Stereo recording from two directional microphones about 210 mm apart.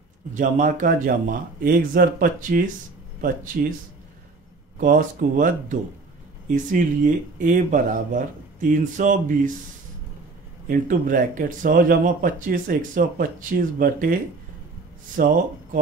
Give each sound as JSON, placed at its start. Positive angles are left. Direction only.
{"t": 0.3, "sound": "speech", "side_deg": -35}
{"t": 4.7, "sound": "speech", "side_deg": -40}
{"t": 10.7, "sound": "speech", "side_deg": -40}